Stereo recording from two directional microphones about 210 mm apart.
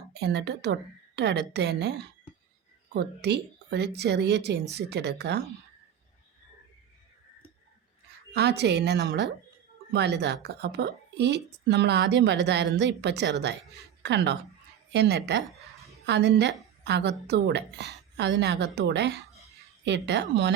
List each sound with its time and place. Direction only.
0.1 s speech: 55° right (ahead or behind)
8.3 s a woman's voice: 50° right (ahead or behind)